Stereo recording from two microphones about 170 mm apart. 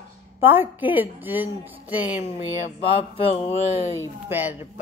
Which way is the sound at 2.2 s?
35° left (ahead or behind).